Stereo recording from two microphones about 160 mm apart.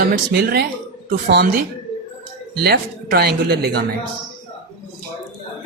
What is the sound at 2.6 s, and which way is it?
A woman's voice, 80° right.